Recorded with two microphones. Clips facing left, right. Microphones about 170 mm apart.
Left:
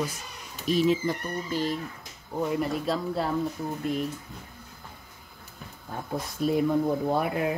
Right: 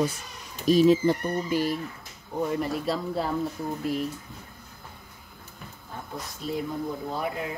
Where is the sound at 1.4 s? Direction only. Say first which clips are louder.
Right 1 dB; 10° right (ahead or behind).